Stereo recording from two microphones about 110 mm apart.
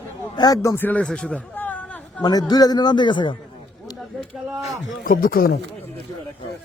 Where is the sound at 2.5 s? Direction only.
35° left (ahead or behind).